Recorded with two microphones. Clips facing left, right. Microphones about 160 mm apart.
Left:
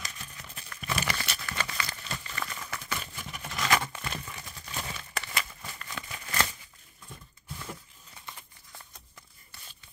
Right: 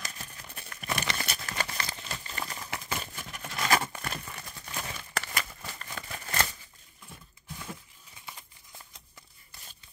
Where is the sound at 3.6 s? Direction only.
35° right (ahead or behind).